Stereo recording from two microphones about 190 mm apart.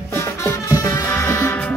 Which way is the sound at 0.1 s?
15° left (ahead or behind).